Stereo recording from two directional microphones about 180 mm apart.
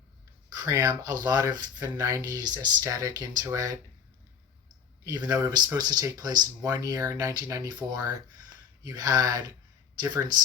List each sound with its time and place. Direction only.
0.5 s speech: 20° right (ahead or behind)
5.1 s speech: 20° right (ahead or behind)